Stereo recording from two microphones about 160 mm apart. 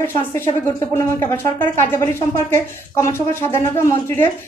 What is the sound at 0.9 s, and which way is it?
Speech, 15° left (ahead or behind).